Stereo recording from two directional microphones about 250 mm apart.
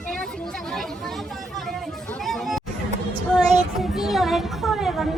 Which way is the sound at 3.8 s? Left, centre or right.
Centre.